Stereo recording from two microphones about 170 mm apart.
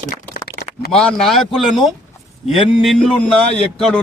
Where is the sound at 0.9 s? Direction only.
5° left (ahead or behind).